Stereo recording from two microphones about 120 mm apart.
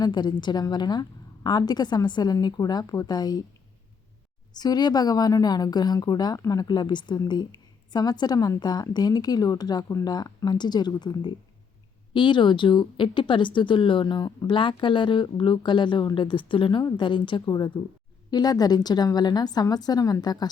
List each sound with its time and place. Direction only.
0.0 s a woman's voice: 35° left (ahead or behind)
4.5 s a woman's voice: 35° left (ahead or behind)